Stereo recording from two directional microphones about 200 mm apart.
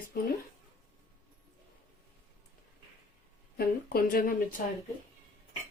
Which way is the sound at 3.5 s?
50° left (ahead or behind).